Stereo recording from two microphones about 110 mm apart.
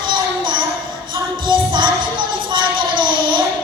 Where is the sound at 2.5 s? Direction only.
45° right (ahead or behind).